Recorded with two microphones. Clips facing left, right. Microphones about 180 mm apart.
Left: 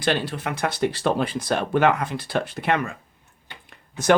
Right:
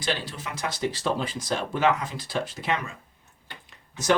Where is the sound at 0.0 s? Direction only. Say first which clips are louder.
Left 7 dB; 60° left (ahead or behind).